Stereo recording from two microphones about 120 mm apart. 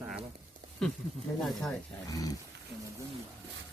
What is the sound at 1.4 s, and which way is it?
Speech, 5° left (ahead or behind).